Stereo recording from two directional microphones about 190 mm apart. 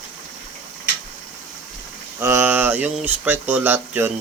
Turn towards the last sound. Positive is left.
turn(degrees=-10)  # may be behind; listen again after turning